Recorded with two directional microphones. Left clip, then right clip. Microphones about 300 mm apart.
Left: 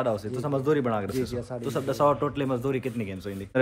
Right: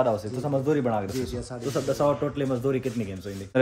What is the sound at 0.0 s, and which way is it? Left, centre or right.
A man's voice, centre.